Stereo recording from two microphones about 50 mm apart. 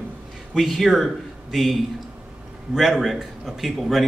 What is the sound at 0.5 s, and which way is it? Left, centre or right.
Speech, centre.